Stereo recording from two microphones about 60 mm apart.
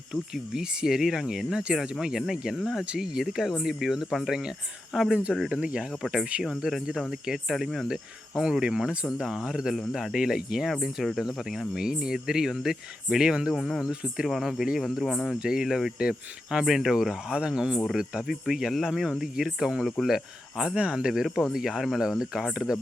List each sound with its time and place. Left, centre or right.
0.1 s speech: centre
6.0 s speech: centre
13.5 s speech: centre
20.7 s speech: centre